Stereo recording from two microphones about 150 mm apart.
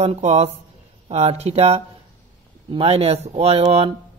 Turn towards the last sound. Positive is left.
turn(degrees=-40)  # may be behind; listen again after turning